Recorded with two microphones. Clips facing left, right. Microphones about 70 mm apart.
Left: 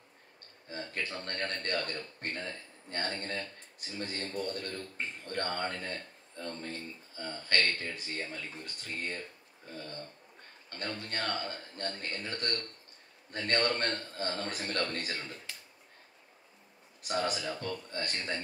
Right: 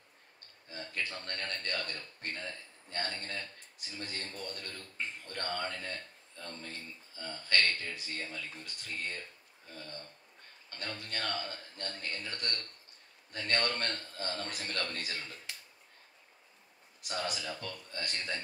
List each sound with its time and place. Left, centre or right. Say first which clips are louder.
0.7 s a man's voice: left 2 dB; left
10.8 s a man's voice: left 3 dB; left
17.1 s a man's voice: left 5 dB; left